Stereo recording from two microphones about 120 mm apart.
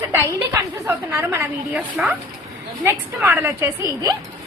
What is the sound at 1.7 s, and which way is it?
A woman's voice, 10° right (ahead or behind).